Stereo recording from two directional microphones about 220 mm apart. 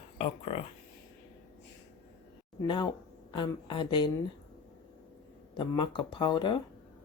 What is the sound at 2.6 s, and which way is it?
Speech, 20° left (ahead or behind).